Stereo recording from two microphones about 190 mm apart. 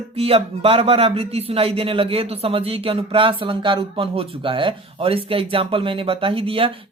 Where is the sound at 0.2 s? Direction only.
30° right (ahead or behind).